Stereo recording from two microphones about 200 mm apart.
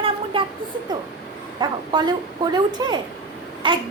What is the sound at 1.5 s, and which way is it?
Speech, 20° right (ahead or behind).